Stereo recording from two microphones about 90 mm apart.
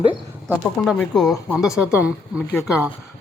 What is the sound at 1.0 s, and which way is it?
Speech, centre (ahead or behind).